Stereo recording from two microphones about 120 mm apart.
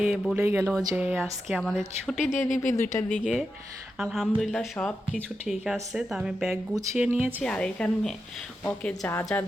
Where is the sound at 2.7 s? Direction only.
30° left (ahead or behind).